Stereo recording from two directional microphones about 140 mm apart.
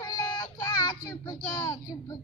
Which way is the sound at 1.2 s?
30° left (ahead or behind).